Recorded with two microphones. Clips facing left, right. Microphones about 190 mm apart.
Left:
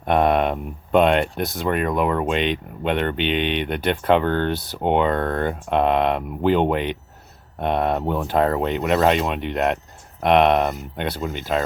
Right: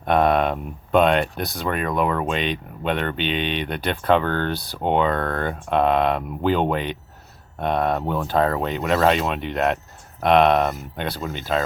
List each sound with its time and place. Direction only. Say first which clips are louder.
0.0 s speech: even; 20° left (ahead or behind)
3.2 s speech: left 3 dB; 65° left (ahead or behind)
3.7 s speech: left 1 dB; 20° left (ahead or behind)